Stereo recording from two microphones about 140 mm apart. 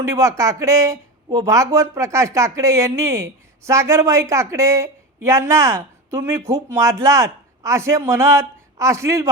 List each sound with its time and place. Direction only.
0.0 s speech: 25° right (ahead or behind)